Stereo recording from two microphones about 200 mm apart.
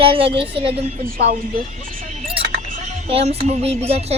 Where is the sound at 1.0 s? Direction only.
45° right (ahead or behind).